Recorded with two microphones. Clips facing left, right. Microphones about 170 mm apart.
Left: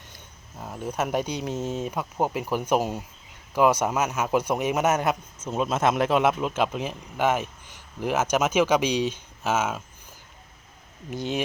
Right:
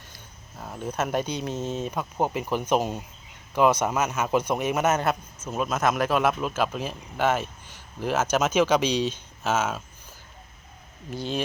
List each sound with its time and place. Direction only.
0.6 s speech: 10° left (ahead or behind)
5.5 s speech: 25° left (ahead or behind)
11.1 s speech: 20° left (ahead or behind)